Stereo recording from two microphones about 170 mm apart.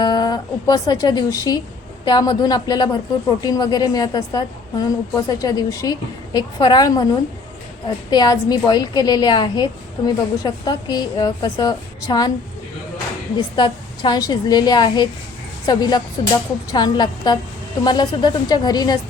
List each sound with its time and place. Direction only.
0.0 s a woman's voice: 25° left (ahead or behind)
13.3 s a woman's voice: 25° left (ahead or behind)